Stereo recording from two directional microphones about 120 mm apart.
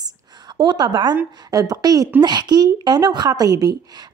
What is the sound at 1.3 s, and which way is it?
A woman's voice, 30° right (ahead or behind).